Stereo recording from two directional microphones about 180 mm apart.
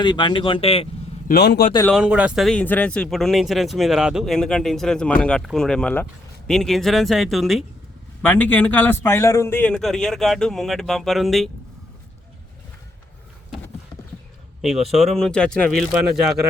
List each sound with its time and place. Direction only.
0.0 s speech: 25° left (ahead or behind)
1.3 s a man's voice: 60° left (ahead or behind)
1.9 s a man's voice: 5° right (ahead or behind)
14.6 s a man's voice: centre (ahead or behind)